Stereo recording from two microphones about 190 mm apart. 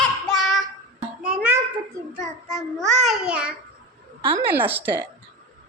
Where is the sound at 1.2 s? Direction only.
5° right (ahead or behind).